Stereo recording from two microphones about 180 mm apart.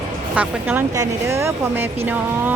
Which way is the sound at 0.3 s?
10° right (ahead or behind).